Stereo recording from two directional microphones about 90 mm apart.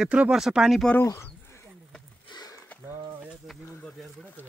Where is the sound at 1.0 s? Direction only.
30° left (ahead or behind).